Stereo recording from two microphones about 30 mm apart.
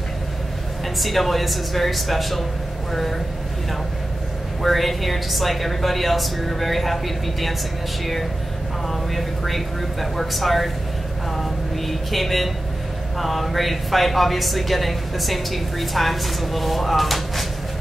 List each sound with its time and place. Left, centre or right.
0.9 s a woman's voice: centre
4.6 s a woman's voice: centre
8.8 s a woman's voice: centre